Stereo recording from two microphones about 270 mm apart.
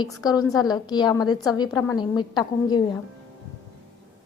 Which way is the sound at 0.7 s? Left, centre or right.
Centre.